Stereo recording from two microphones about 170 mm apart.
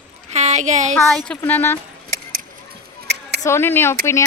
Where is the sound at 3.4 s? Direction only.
15° left (ahead or behind).